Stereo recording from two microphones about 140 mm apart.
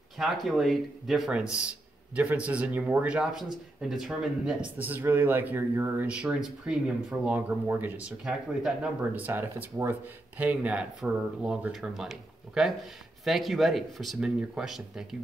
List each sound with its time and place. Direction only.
0.2 s speech: centre (ahead or behind)
8.2 s speech: 5° right (ahead or behind)